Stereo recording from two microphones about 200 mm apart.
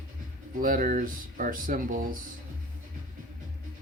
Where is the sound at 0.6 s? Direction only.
45° right (ahead or behind).